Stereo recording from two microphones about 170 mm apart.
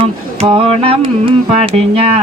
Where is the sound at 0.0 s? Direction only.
35° right (ahead or behind).